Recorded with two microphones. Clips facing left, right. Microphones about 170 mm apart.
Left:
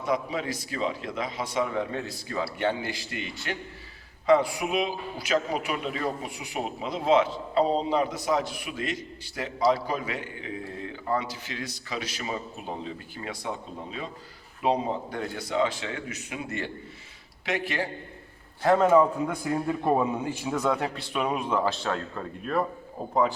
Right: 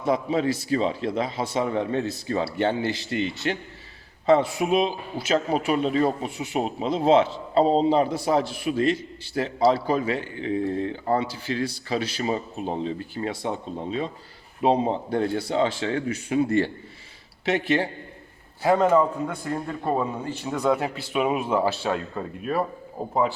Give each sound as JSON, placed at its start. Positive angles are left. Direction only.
{"t": 0.0, "sound": "a man's voice", "side_deg": -30}
{"t": 18.6, "sound": "a man's voice", "side_deg": 0}
{"t": 20.5, "sound": "speech", "side_deg": 0}